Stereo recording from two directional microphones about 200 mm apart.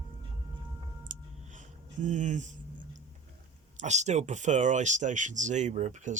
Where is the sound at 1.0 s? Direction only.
40° right (ahead or behind).